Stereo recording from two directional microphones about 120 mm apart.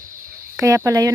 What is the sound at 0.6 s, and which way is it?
Speech, 25° right (ahead or behind).